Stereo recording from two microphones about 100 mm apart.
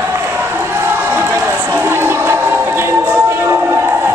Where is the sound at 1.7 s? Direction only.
25° right (ahead or behind).